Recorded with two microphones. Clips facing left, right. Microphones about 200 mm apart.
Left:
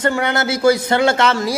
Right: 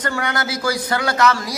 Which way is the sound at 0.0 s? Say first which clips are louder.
Left 5 dB; 25° left (ahead or behind).